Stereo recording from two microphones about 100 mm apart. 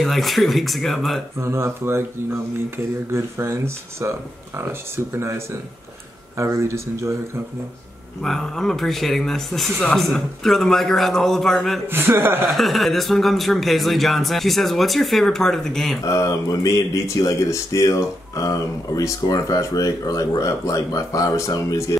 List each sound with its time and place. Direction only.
0.0 s speech: centre (ahead or behind)
1.4 s speech: 25° right (ahead or behind)
3.1 s speech: 25° right (ahead or behind)
6.3 s speech: 30° right (ahead or behind)
8.2 s speech: 5° left (ahead or behind)
11.9 s speech: 20° right (ahead or behind)
12.4 s speech: centre (ahead or behind)
16.0 s speech: 35° left (ahead or behind)